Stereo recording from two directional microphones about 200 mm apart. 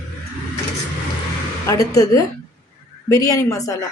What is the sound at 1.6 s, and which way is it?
Speech, 15° left (ahead or behind).